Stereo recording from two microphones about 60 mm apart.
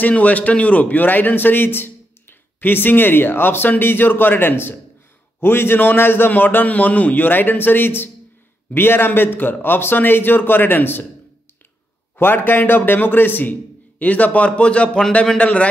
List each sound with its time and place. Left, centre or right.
0.1 s a man's voice: left
12.2 s a man's voice: left; by 15.7 s centre